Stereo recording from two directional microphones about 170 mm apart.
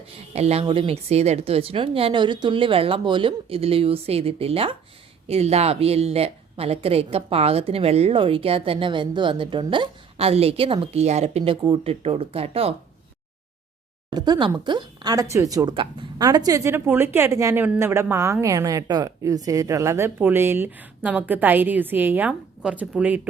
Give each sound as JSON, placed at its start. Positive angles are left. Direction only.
{"t": 0.3, "sound": "a woman's voice", "side_deg": -35}
{"t": 14.1, "sound": "speech", "side_deg": -25}